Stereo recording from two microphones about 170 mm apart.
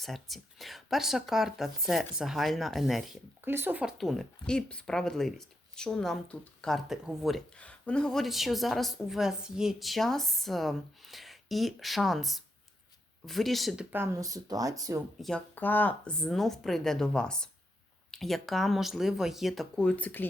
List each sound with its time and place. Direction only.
0.0 s speech: centre (ahead or behind)
3.4 s speech: 10° right (ahead or behind)
13.9 s speech: 15° right (ahead or behind)
15.2 s speech: 5° left (ahead or behind)